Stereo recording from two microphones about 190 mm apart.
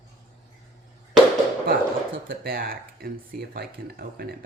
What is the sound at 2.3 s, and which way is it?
Speech, 50° right (ahead or behind).